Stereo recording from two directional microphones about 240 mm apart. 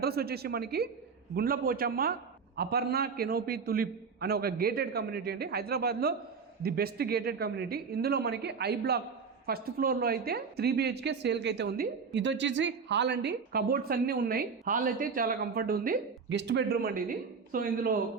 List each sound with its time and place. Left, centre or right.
0.0 s speech: right